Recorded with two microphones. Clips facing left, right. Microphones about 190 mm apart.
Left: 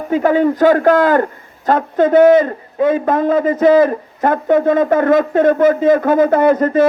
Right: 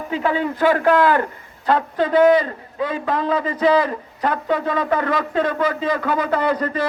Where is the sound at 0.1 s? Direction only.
45° left (ahead or behind).